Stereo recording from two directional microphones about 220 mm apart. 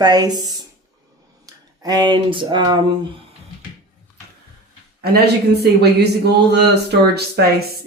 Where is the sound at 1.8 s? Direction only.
20° right (ahead or behind).